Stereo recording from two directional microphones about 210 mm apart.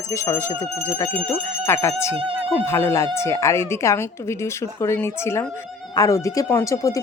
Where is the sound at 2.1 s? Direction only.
25° right (ahead or behind).